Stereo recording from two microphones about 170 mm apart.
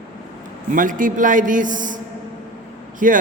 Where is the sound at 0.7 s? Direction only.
50° right (ahead or behind).